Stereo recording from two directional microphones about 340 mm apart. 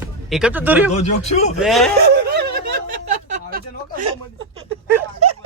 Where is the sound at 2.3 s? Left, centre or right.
Right.